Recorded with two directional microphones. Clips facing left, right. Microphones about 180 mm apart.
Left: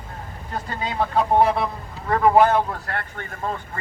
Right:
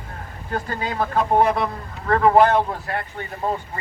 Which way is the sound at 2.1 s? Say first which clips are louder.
Right 1 dB; 10° left (ahead or behind).